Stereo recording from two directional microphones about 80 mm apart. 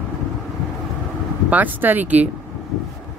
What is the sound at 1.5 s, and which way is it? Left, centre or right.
Speech, right.